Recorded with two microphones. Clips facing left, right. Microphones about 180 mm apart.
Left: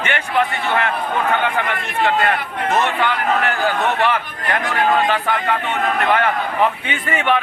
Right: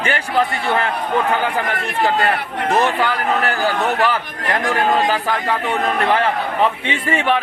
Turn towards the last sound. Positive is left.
turn(degrees=-30)  # may be behind; listen again after turning